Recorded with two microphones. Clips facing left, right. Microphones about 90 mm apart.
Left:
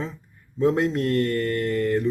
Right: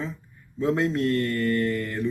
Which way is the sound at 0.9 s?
50° left (ahead or behind).